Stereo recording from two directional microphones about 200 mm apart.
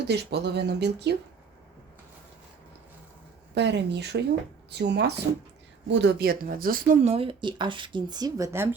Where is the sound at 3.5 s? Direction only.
60° right (ahead or behind).